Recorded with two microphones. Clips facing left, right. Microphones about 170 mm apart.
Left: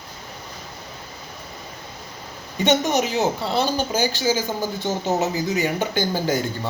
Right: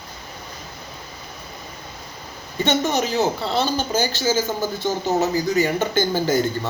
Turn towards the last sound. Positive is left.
turn(degrees=15)  # may be behind; listen again after turning